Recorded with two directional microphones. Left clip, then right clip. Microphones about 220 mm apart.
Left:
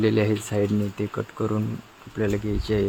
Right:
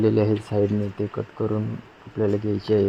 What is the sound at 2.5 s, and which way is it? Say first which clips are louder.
Speech: right 3 dB; 10° right (ahead or behind).